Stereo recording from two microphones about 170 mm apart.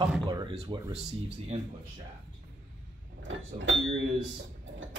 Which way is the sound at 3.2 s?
90° right.